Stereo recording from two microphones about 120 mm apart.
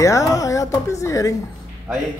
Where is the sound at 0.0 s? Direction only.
25° left (ahead or behind).